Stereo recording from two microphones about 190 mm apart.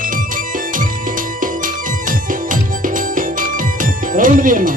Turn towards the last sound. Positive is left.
turn(degrees=-45)  # may be behind; listen again after turning